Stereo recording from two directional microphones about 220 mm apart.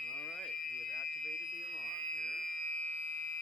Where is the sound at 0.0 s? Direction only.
Centre (ahead or behind).